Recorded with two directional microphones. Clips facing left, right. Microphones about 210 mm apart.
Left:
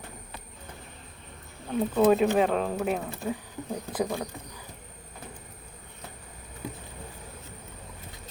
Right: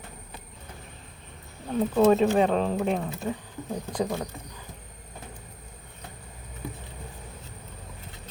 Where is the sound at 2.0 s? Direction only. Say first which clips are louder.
Right 1 dB; 5° left (ahead or behind).